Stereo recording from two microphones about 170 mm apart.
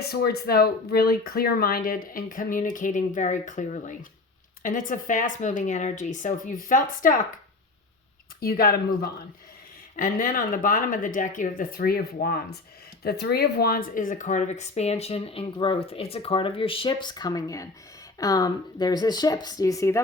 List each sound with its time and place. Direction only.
0.1 s speech: 65° left (ahead or behind)
8.4 s speech: 60° left (ahead or behind); by 20.0 s 20° left (ahead or behind)